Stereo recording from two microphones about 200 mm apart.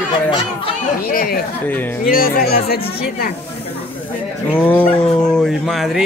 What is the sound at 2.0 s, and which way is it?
Speech, 45° left (ahead or behind).